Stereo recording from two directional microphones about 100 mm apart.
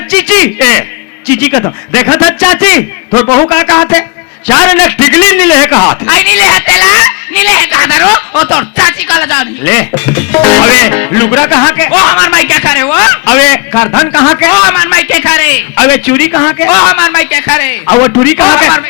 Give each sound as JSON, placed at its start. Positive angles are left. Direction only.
{"t": 0.1, "sound": "speech", "side_deg": 20}